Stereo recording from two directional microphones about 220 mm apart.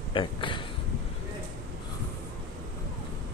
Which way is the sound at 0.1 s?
20° left (ahead or behind).